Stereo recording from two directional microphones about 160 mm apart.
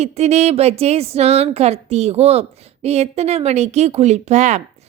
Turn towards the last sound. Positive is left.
turn(degrees=-45)  # may be behind; listen again after turning